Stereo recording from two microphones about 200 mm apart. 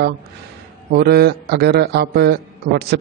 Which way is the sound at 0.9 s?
55° right (ahead or behind).